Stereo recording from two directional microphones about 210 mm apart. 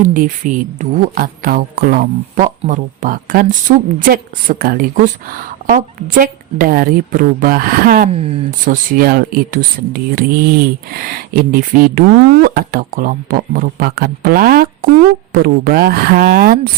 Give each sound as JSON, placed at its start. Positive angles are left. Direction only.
{"t": 0.0, "sound": "speech", "side_deg": -40}